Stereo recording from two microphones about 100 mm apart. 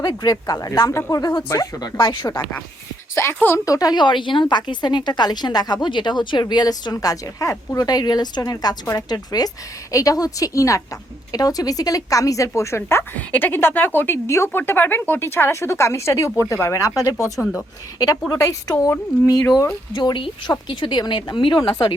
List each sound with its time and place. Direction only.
0.0 s speech: 45° left (ahead or behind)
0.9 s speech: 25° left (ahead or behind)
1.1 s speech: 45° left (ahead or behind)
3.2 s speech: 30° left (ahead or behind)
7.9 s speech: 40° left (ahead or behind)